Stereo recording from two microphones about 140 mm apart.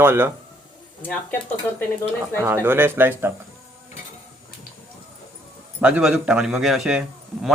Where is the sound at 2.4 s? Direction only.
15° right (ahead or behind).